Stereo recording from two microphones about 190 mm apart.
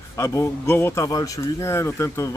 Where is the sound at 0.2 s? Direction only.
15° left (ahead or behind).